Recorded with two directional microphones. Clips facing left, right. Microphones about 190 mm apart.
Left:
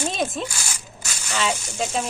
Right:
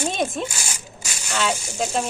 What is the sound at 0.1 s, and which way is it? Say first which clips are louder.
Speech: right 1 dB; centre (ahead or behind).